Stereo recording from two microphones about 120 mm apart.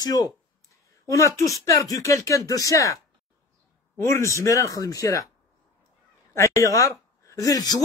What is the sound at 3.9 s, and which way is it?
Speech, 20° left (ahead or behind).